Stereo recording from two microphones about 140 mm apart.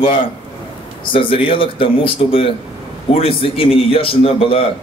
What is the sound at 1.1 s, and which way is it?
Speech, 40° left (ahead or behind).